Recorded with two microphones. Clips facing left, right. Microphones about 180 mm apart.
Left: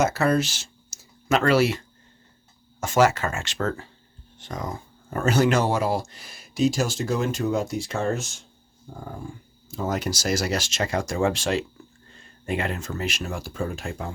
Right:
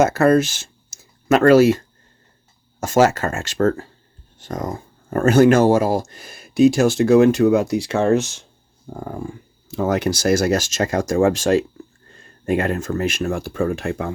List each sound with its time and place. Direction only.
0.0 s speech: 50° right (ahead or behind)
2.8 s speech: 45° right (ahead or behind); by 14.1 s 65° right (ahead or behind)